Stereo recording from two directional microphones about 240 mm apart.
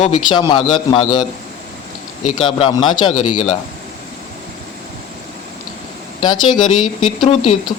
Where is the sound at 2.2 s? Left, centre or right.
Left.